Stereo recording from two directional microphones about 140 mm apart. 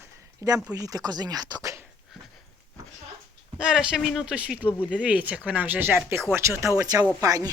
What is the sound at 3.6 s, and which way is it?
Speech, 5° right (ahead or behind).